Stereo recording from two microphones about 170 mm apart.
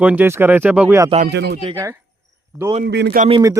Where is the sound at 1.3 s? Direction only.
80° right.